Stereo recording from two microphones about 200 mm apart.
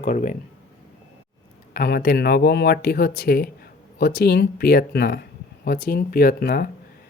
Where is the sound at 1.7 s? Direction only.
50° left (ahead or behind).